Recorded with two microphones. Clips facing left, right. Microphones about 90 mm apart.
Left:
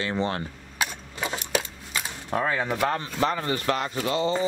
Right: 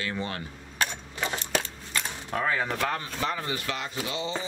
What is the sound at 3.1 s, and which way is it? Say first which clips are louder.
Speech: left 5 dB; 40° left (ahead or behind).